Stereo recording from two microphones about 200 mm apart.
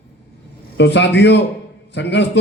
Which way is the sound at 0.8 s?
60° left (ahead or behind).